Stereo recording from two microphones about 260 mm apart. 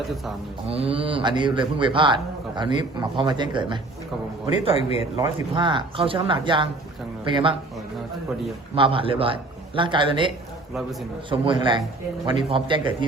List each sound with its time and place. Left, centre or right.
0.7 s a man's voice: right
4.8 s speech: left
5.1 s a man's voice: centre
8.7 s a man's voice: centre